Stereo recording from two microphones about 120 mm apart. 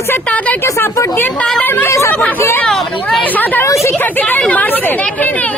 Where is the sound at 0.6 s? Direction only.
25° left (ahead or behind).